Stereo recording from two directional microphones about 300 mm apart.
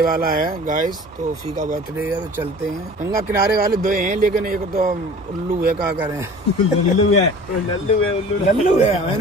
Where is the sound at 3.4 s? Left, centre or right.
Right.